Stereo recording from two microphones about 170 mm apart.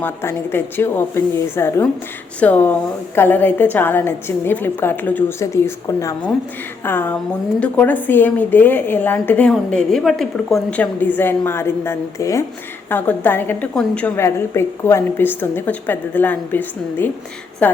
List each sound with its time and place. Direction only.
0.0 s a woman's voice: 15° left (ahead or behind)